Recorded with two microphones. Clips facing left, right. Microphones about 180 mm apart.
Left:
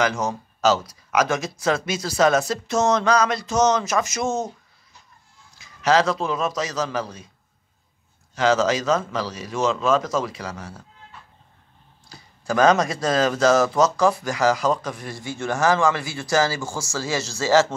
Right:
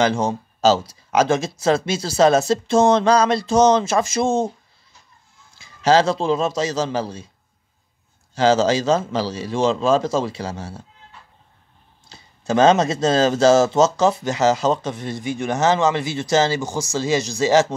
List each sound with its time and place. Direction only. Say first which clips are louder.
0.0 s speech: right 4 dB; 30° right (ahead or behind)
5.6 s speech: right 3 dB; 30° right (ahead or behind)
8.4 s speech: right 3 dB; 30° right (ahead or behind)
12.1 s speech: right 4 dB; 25° right (ahead or behind)